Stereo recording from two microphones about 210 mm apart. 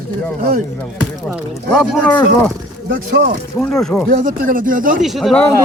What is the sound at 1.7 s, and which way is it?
Speech, centre (ahead or behind).